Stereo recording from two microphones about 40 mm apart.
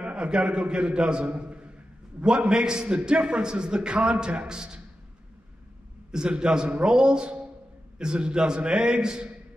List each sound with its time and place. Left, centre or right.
0.0 s a man's voice: right
6.1 s a man's voice: right